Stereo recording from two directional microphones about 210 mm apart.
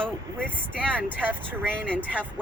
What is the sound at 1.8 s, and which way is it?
Speech, 5° left (ahead or behind).